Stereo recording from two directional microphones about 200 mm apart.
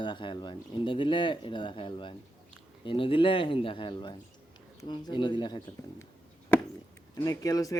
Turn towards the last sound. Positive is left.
turn(degrees=15)  # may be behind; listen again after turning